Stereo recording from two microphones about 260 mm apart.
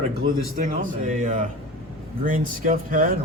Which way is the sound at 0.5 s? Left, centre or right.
Right.